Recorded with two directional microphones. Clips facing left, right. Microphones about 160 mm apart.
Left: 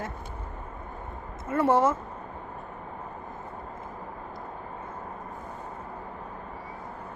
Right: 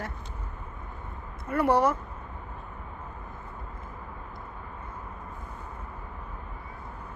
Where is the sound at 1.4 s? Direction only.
25° left (ahead or behind).